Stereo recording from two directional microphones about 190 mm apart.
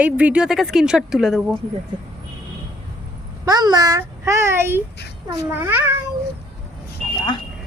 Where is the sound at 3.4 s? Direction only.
20° right (ahead or behind).